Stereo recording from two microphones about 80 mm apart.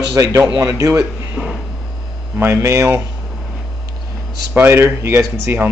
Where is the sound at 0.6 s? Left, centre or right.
Right.